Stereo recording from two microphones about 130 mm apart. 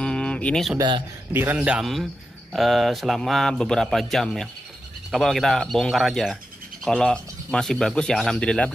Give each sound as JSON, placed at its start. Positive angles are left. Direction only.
{"t": 0.0, "sound": "a sound", "side_deg": 10}
{"t": 0.7, "sound": "a man's voice", "side_deg": -35}
{"t": 1.3, "sound": "a man's voice", "side_deg": -15}
{"t": 2.5, "sound": "speech", "side_deg": 0}